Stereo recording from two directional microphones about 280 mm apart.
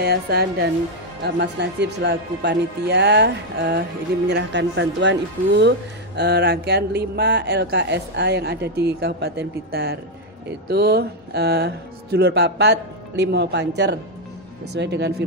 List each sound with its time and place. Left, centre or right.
0.0 s speech: right